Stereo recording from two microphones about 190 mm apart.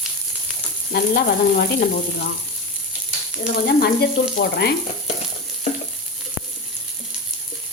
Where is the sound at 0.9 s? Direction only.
55° left (ahead or behind).